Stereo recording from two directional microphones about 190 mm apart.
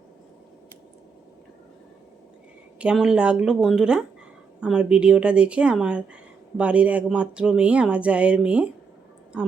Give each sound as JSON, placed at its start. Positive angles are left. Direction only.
{"t": 2.7, "sound": "speech", "side_deg": -5}